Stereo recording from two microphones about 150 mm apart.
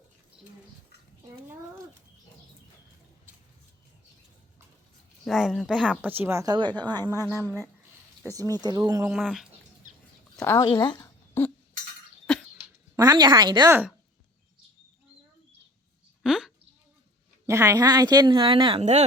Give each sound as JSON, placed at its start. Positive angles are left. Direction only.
{"t": 5.2, "sound": "speech", "side_deg": 0}
{"t": 6.0, "sound": "speech", "side_deg": -15}
{"t": 9.1, "sound": "speech", "side_deg": 0}
{"t": 10.3, "sound": "speech", "side_deg": 15}
{"t": 10.6, "sound": "speech", "side_deg": 30}
{"t": 13.0, "sound": "speech", "side_deg": -25}
{"t": 13.7, "sound": "a woman's voice", "side_deg": -15}
{"t": 16.2, "sound": "a sound", "side_deg": -5}
{"t": 17.4, "sound": "speech", "side_deg": -20}
{"t": 18.8, "sound": "speech", "side_deg": -45}